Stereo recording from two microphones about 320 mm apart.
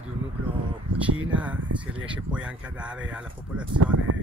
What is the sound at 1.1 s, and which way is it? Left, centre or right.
Speech, right.